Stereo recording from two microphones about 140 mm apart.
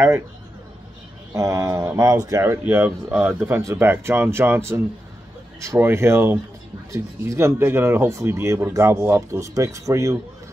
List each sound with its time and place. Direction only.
1.3 s speech: 20° right (ahead or behind)